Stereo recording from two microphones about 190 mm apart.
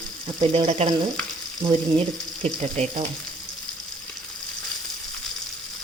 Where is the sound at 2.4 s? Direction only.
35° right (ahead or behind).